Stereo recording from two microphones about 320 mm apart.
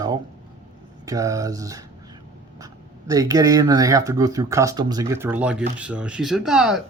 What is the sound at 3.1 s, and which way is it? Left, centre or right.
Speech, centre.